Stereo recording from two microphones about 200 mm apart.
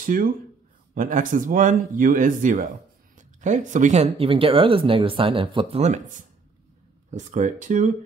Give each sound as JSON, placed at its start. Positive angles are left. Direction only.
{"t": 0.0, "sound": "speech", "side_deg": -45}